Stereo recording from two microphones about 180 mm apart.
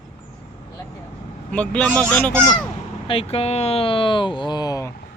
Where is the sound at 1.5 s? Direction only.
5° left (ahead or behind).